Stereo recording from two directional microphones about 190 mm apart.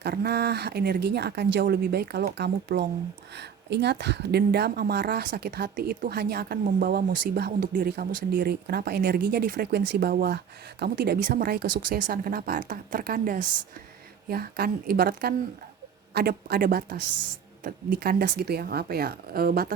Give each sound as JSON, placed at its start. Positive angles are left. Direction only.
{"t": 0.0, "sound": "speech", "side_deg": -60}